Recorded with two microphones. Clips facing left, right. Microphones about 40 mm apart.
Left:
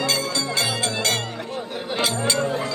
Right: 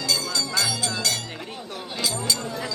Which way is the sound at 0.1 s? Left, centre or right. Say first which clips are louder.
Left 2 dB; left.